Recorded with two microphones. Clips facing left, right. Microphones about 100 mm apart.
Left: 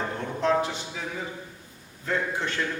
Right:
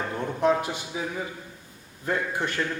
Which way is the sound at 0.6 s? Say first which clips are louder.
Even; 10° right (ahead or behind).